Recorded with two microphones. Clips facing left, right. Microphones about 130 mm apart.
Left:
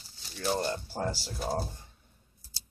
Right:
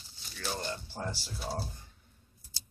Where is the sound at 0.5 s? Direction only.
35° left (ahead or behind).